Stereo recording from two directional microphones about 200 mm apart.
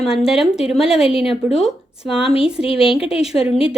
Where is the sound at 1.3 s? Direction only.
30° left (ahead or behind).